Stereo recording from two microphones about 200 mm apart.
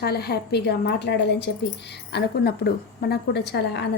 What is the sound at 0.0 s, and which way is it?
A woman's voice, 55° left (ahead or behind).